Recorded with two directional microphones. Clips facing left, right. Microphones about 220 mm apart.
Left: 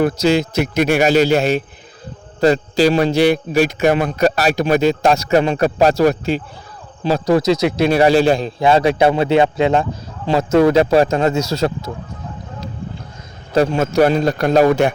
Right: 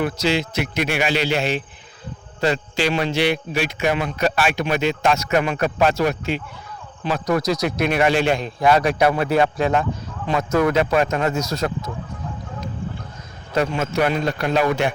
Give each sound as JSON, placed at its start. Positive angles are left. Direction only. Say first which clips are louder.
{"t": 0.0, "sound": "a man's voice", "louder": "left 6 dB", "side_deg": 45}
{"t": 13.5, "sound": "a man's voice", "louder": "left 6 dB", "side_deg": 35}